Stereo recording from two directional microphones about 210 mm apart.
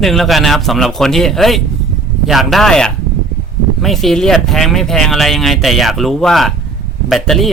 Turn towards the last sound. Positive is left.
turn(degrees=0)  # may be behind; listen again after turning